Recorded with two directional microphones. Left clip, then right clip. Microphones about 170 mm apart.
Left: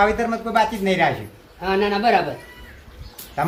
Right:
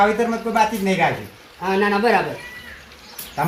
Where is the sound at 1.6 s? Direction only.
45° left (ahead or behind).